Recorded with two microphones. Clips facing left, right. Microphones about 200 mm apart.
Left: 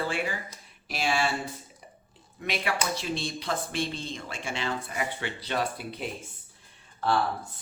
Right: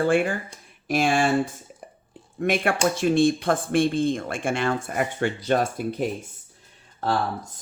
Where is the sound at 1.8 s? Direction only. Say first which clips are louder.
Right 7 dB; 50° right (ahead or behind).